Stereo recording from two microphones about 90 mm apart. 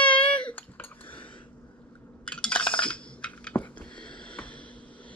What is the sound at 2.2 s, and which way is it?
Coin, 15° left (ahead or behind).